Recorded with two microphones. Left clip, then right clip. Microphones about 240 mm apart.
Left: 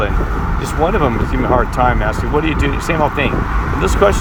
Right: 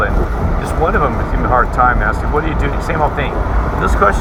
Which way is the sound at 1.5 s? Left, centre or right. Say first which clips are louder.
Right 3 dB; left.